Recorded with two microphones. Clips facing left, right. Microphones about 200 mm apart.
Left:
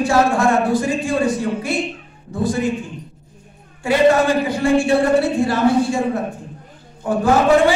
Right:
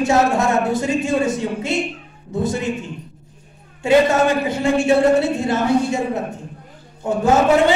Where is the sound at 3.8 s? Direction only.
25° right (ahead or behind).